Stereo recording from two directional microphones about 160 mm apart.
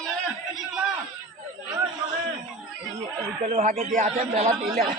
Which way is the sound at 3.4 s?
50° right (ahead or behind).